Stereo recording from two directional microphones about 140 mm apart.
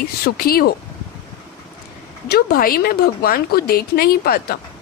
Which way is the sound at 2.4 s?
90° left.